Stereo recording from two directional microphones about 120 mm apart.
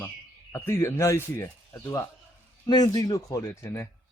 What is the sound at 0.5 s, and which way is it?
Speech, 20° left (ahead or behind).